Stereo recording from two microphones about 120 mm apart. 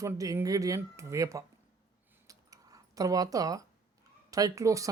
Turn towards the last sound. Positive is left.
turn(degrees=-25)  # may be behind; listen again after turning